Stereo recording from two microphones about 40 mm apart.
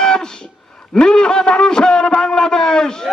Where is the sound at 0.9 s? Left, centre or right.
Centre.